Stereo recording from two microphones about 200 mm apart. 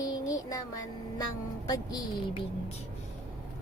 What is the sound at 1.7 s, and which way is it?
Speech, 20° left (ahead or behind).